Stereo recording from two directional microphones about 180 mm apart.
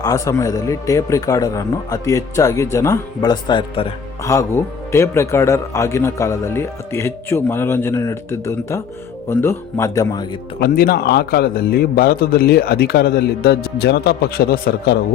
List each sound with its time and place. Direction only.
0.0 s a man's voice: 20° left (ahead or behind)
10.6 s a man's voice: 55° left (ahead or behind)